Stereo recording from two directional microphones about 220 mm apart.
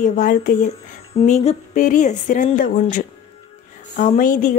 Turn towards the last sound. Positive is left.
turn(degrees=40)  # may be behind; listen again after turning